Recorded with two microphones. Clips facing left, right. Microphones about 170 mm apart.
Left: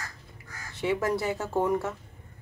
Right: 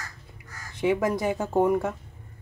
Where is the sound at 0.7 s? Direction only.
15° right (ahead or behind).